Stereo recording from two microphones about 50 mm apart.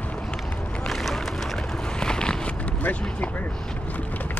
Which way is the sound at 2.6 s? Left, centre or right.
Left.